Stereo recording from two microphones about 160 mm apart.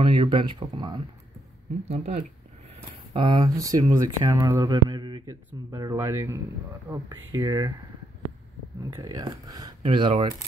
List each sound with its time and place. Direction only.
0.0 s speech: 30° right (ahead or behind)
1.9 s speech: 40° right (ahead or behind)
3.1 s speech: 30° right (ahead or behind)
8.9 s speech: 20° right (ahead or behind)